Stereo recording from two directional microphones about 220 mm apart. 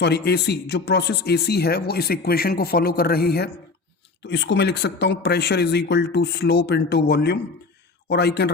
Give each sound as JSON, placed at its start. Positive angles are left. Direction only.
{"t": 0.0, "sound": "speech", "side_deg": 50}